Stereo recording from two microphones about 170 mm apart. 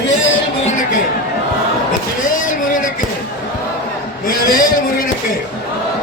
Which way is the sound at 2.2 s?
50° left (ahead or behind).